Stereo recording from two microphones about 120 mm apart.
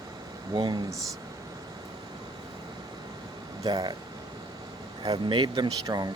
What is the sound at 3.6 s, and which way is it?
Speech, 35° right (ahead or behind).